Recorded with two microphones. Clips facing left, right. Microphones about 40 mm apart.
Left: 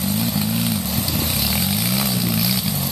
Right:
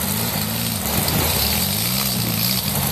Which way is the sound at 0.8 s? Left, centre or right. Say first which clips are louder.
Right 2 dB; right.